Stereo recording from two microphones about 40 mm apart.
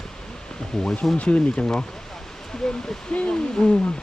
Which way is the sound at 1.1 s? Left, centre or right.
Left.